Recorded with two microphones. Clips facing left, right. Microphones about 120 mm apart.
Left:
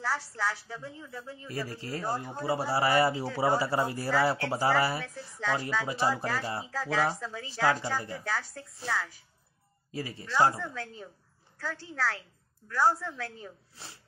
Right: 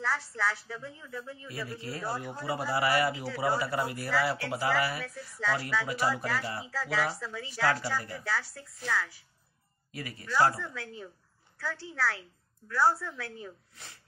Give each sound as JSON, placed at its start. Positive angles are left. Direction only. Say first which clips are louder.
{"t": 0.0, "sound": "a woman's voice", "louder": "even", "side_deg": 10}
{"t": 1.6, "sound": "speech", "louder": "left 2 dB", "side_deg": 35}
{"t": 6.7, "sound": "a woman's voice", "louder": "left 2 dB", "side_deg": 15}
{"t": 12.7, "sound": "a woman's voice", "louder": "even", "side_deg": 15}
{"t": 13.4, "sound": "speech", "louder": "right 1 dB", "side_deg": 25}